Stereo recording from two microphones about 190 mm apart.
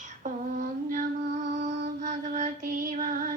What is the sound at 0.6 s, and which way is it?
Music, 45° right (ahead or behind).